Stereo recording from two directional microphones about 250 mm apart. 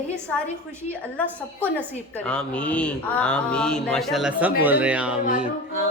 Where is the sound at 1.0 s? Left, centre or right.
Centre.